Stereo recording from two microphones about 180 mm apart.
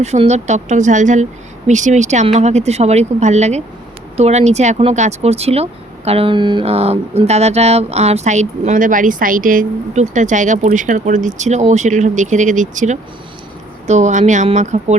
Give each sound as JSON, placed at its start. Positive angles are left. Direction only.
{"t": 0.0, "sound": "speech", "side_deg": -40}